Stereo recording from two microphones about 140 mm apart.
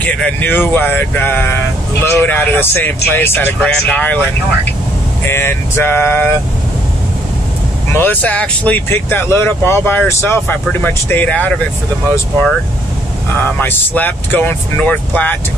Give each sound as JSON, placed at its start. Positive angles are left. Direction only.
{"t": 0.0, "sound": "speech", "side_deg": 10}
{"t": 5.2, "sound": "speech", "side_deg": 15}
{"t": 7.9, "sound": "speech", "side_deg": 15}
{"t": 13.6, "sound": "speech", "side_deg": 15}